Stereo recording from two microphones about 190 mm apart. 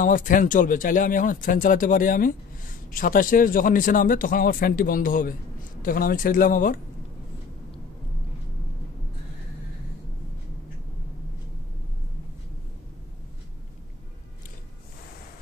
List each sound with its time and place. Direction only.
0.0 s a man's voice: 45° left (ahead or behind)